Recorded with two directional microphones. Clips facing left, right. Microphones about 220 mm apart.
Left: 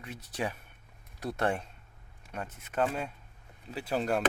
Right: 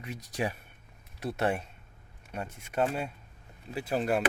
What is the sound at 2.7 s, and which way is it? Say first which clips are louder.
Speech: right 1 dB; 15° right (ahead or behind).